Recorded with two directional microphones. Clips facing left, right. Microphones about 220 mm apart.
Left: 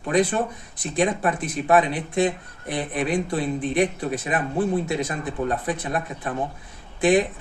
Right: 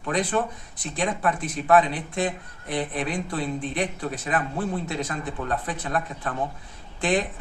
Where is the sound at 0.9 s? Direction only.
20° left (ahead or behind).